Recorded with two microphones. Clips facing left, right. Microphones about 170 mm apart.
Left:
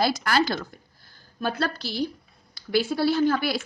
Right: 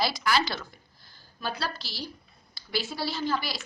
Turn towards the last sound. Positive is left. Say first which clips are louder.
# left 8 dB
turn(degrees=55)  # may be behind; listen again after turning